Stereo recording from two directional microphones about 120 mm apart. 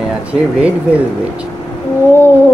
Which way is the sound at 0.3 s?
10° right (ahead or behind).